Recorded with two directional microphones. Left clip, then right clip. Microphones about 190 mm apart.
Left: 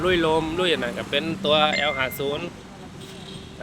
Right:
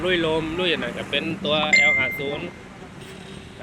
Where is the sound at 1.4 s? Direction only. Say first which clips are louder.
Right 2 dB; 35° left (ahead or behind).